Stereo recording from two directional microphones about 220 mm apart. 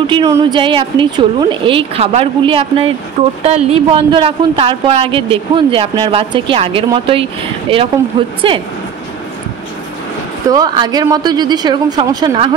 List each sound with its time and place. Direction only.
0.0 s speech: 20° right (ahead or behind)
10.5 s speech: 15° right (ahead or behind)